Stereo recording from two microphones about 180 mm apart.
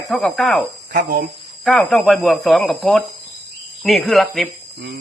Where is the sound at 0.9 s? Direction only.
50° right (ahead or behind).